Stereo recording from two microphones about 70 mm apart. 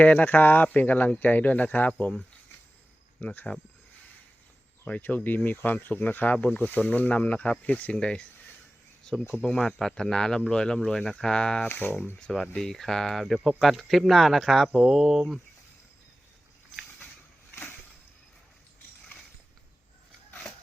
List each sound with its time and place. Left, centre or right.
0.0 s speech: left
4.9 s speech: left
9.4 s speech: centre
11.7 s speech: left
12.5 s speech: centre